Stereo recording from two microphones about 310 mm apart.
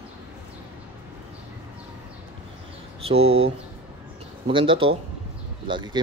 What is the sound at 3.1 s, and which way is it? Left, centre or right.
Speech, right.